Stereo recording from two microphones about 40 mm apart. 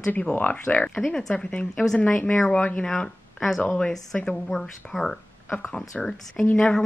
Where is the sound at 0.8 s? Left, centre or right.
Left.